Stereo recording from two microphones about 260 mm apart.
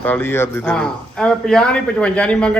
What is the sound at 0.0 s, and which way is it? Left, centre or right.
A man's voice, centre.